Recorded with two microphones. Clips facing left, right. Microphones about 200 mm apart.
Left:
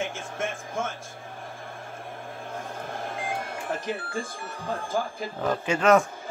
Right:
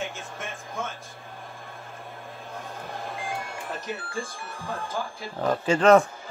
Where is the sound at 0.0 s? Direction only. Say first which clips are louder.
Left 4 dB; 50° left (ahead or behind).